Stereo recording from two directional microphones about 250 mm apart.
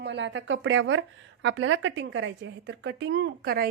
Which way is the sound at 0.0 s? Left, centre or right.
Right.